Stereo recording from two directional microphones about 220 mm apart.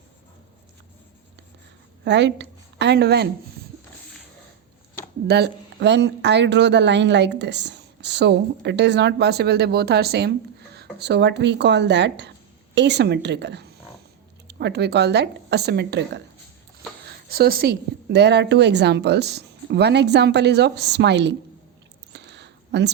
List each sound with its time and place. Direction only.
2.0 s a woman's voice: 50° right (ahead or behind)
5.3 s speech: 50° right (ahead or behind)
22.1 s a sound: 50° right (ahead or behind)